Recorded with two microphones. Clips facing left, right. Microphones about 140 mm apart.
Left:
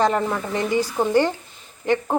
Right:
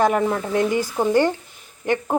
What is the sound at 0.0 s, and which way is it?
Speech, 10° right (ahead or behind).